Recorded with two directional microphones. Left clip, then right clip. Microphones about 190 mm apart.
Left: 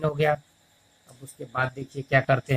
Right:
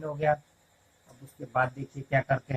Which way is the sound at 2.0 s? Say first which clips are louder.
Left 5 dB; 40° left (ahead or behind).